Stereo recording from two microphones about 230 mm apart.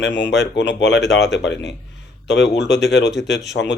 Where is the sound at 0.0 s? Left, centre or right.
Left.